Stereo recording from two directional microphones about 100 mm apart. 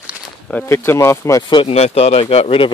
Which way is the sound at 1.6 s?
90° left.